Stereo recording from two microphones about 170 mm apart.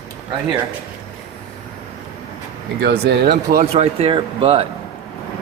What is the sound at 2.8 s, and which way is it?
Speech, 75° right (ahead or behind).